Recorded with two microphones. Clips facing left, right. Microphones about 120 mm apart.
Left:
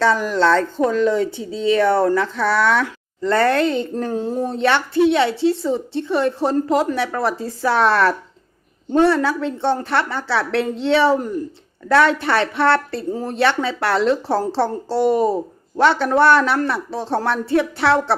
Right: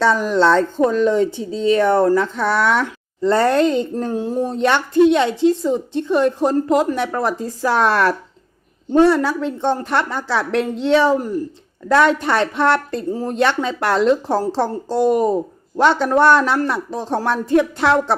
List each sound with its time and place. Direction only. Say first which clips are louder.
0.2 s a woman's voice: right 2 dB; 20° right (ahead or behind)